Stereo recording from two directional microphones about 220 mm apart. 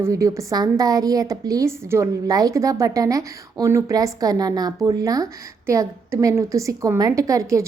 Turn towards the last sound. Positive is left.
turn(degrees=-15)  # may be behind; listen again after turning